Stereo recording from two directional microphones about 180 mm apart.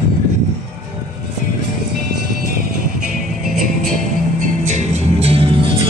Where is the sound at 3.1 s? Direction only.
Centre (ahead or behind).